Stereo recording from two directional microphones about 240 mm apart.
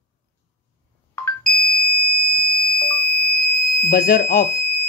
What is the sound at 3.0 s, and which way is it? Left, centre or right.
Fire alarm, left.